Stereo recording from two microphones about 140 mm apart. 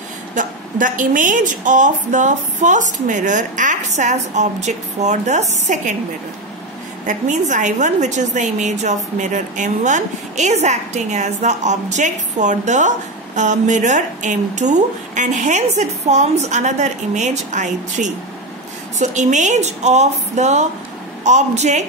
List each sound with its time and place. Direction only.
0.3 s a woman's voice: 70° right (ahead or behind)
7.1 s a woman's voice: 60° right (ahead or behind)